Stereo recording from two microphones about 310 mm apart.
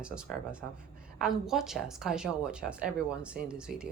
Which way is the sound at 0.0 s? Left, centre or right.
Centre.